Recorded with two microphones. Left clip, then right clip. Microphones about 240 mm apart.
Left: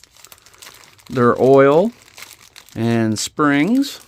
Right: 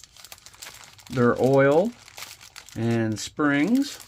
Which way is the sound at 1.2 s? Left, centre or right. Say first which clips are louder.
Left 8 dB; left.